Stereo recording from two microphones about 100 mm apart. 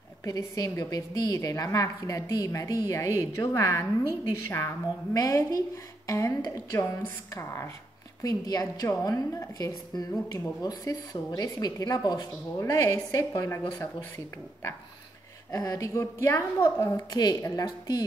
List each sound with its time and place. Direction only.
0.2 s a woman's voice: 35° left (ahead or behind)
8.2 s a woman's voice: 40° left (ahead or behind)
15.5 s a woman's voice: 35° left (ahead or behind)
17.1 s a woman's voice: 45° left (ahead or behind)